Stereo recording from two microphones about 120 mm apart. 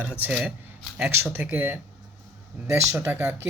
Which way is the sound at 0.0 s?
10° right (ahead or behind).